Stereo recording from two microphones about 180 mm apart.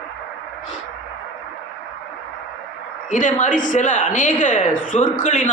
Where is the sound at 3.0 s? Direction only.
45° left (ahead or behind).